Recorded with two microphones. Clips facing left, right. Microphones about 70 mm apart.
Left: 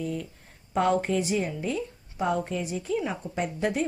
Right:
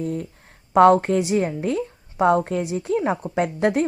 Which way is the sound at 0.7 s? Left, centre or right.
Right.